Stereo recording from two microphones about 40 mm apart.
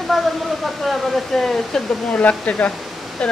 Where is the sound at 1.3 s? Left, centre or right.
Centre.